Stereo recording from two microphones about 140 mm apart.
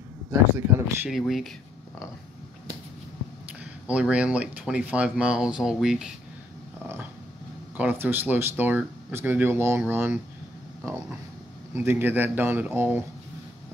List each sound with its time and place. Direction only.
0.3 s speech: 15° right (ahead or behind)
1.1 s speech: centre (ahead or behind)
3.8 s speech: 10° right (ahead or behind)
7.7 s speech: 10° right (ahead or behind)
11.7 s speech: 15° right (ahead or behind)